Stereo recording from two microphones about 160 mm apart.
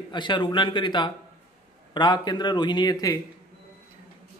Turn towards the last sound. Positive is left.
turn(degrees=25)  # may be behind; listen again after turning